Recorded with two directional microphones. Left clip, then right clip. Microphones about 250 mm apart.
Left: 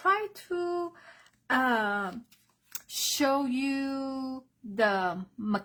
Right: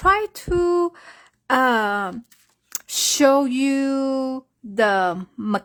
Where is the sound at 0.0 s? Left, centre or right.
Right.